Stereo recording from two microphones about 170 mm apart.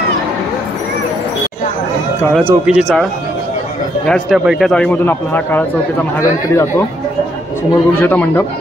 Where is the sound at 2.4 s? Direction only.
5° right (ahead or behind).